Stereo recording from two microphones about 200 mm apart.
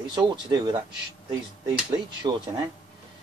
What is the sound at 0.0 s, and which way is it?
Speech, 20° right (ahead or behind).